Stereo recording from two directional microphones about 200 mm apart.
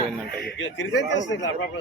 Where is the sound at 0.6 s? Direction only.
65° left (ahead or behind).